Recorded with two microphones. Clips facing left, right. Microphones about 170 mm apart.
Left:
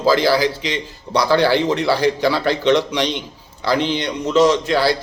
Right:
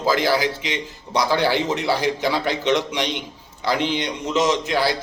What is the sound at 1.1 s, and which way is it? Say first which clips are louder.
A man's voice: left 4 dB; 15° right (ahead or behind).